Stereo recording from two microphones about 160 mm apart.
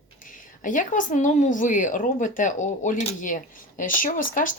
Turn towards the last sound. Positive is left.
turn(degrees=55)  # may be behind; listen again after turning